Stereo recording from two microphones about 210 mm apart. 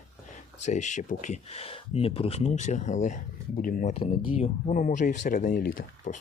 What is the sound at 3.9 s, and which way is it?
Speech, 25° left (ahead or behind).